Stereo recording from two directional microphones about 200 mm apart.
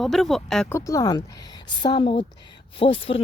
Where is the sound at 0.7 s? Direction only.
15° left (ahead or behind).